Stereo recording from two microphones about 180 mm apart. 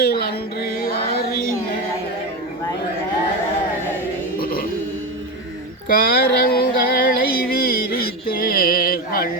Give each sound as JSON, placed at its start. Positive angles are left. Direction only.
{"t": 0.0, "sound": "music", "side_deg": 60}
{"t": 4.4, "sound": "chant", "side_deg": 55}
{"t": 5.9, "sound": "a sound", "side_deg": 55}